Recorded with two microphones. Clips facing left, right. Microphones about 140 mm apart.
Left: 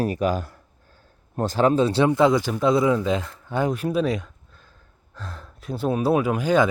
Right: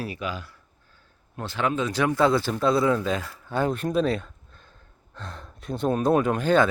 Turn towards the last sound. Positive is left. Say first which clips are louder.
# left 1 dB
turn(degrees=10)  # may be behind; listen again after turning